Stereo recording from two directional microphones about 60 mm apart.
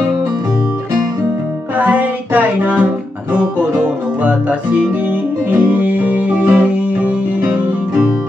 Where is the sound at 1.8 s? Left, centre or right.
Right.